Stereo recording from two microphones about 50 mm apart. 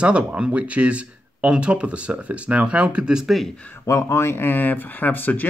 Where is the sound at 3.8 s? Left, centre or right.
Left.